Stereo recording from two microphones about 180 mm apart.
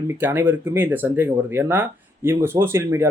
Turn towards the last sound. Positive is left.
turn(degrees=-15)  # may be behind; listen again after turning